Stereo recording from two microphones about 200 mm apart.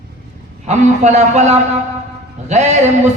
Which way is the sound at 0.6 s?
35° right (ahead or behind).